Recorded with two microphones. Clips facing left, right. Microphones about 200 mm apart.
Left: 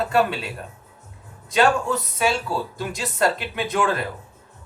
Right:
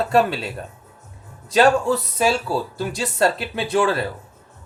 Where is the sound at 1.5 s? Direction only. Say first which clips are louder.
Right 4 dB; 30° right (ahead or behind).